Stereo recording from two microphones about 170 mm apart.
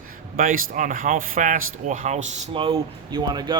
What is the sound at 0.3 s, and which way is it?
Speech, 55° right (ahead or behind).